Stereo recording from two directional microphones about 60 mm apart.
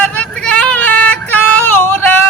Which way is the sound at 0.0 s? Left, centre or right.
Centre.